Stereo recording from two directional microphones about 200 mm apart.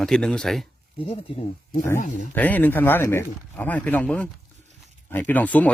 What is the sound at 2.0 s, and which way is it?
Speech, 40° left (ahead or behind).